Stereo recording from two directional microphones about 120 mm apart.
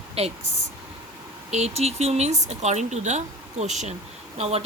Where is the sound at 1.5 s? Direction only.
65° right (ahead or behind).